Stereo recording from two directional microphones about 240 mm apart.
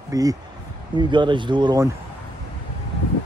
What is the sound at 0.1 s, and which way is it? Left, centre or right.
Speech, centre.